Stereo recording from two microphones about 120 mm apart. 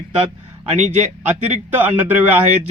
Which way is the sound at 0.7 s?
65° right (ahead or behind).